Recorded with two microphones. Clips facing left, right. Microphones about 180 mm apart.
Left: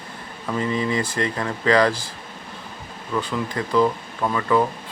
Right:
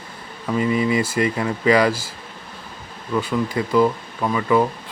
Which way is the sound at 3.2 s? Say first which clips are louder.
Right 4 dB; 10° right (ahead or behind).